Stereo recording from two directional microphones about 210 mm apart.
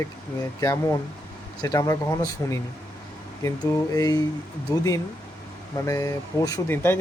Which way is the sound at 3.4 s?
15° left (ahead or behind).